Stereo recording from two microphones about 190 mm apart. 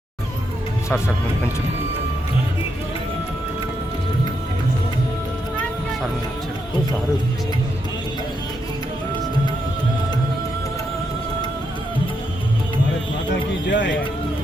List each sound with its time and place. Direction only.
0.9 s speech: 15° left (ahead or behind)
13.7 s speech: 70° left (ahead or behind)